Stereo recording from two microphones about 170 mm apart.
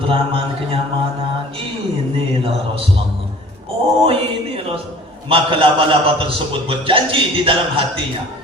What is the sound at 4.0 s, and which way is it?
Mantra, 35° right (ahead or behind).